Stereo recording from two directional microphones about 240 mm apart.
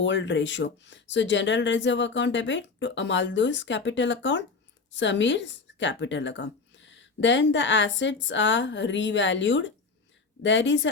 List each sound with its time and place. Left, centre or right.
0.0 s speech: left